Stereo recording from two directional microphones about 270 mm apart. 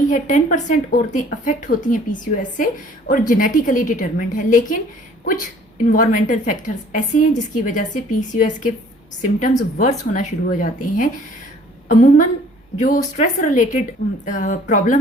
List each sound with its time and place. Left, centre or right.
0.1 s a woman's voice: left
3.1 s a woman's voice: left